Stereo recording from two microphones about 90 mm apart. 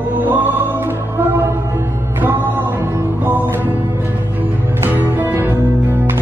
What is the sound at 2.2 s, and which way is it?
Music, 20° right (ahead or behind).